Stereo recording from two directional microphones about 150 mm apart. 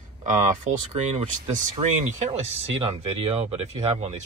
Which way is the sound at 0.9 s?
50° right (ahead or behind).